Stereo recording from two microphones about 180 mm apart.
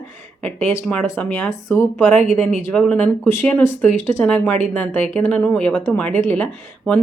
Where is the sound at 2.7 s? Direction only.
5° left (ahead or behind).